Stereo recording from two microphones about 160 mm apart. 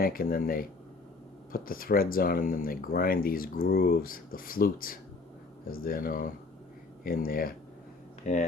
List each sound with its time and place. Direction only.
0.0 s speech: 65° left (ahead or behind)
8.3 s speech: 50° left (ahead or behind)